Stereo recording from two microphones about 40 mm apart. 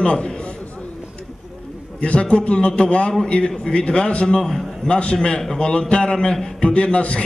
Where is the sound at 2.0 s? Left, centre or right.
Left.